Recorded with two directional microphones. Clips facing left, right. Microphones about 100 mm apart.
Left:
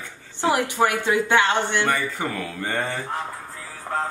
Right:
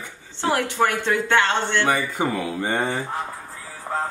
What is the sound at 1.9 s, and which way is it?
Speech, 20° right (ahead or behind).